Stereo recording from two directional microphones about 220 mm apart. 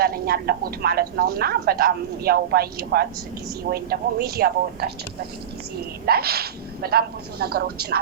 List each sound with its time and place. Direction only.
0.0 s a woman's voice: 45° right (ahead or behind)
6.1 s a woman's voice: 45° right (ahead or behind)